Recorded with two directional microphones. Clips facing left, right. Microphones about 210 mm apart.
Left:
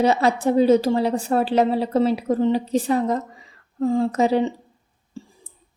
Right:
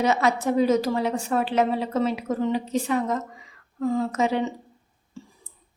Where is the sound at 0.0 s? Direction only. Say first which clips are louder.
Left 4 dB; 30° left (ahead or behind).